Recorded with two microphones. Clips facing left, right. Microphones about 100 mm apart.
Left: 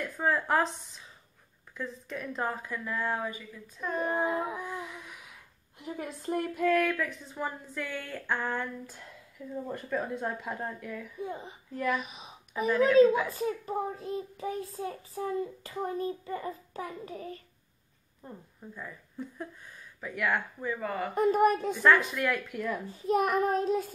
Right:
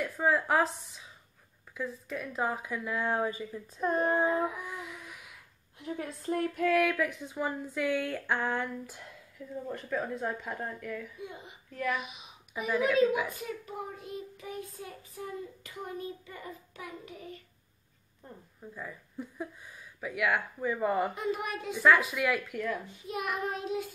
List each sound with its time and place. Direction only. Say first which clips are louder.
0.0 s a woman's voice: right 1 dB; 5° right (ahead or behind); by 4.1 s 35° right (ahead or behind)
5.8 s a woman's voice: right 1 dB; 5° left (ahead or behind)
9.7 s speech: even; 5° left (ahead or behind)
11.1 s a child's voice: left 6 dB; 35° left (ahead or behind)
11.7 s speech: left 2 dB; centre (ahead or behind)
12.0 s a woman's voice: left 1 dB; 35° left (ahead or behind)
18.2 s speech: left 4 dB; 5° left (ahead or behind)
18.8 s a woman's voice: even; 5° right (ahead or behind)
21.1 s a child's voice: left 10 dB; 45° left (ahead or behind)
21.7 s speech: even; 5° right (ahead or behind)
22.8 s a child's voice: left 8 dB; 40° left (ahead or behind)